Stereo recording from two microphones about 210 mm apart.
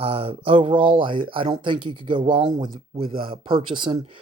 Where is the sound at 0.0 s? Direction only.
25° right (ahead or behind).